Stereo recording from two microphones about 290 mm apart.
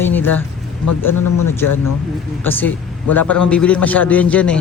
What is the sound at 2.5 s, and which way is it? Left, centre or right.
Speech, centre.